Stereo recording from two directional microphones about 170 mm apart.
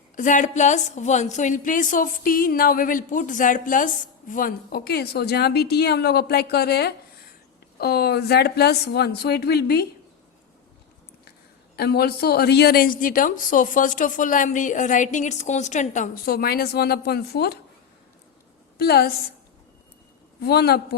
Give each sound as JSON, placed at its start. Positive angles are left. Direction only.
{"t": 0.2, "sound": "a woman's voice", "side_deg": 45}
{"t": 11.8, "sound": "a woman's voice", "side_deg": 70}
{"t": 16.2, "sound": "speech", "side_deg": 65}
{"t": 18.8, "sound": "speech", "side_deg": 65}
{"t": 20.4, "sound": "speech", "side_deg": 70}